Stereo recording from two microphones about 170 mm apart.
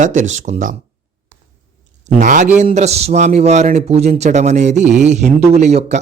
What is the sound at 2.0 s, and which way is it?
A man's voice, 45° right (ahead or behind).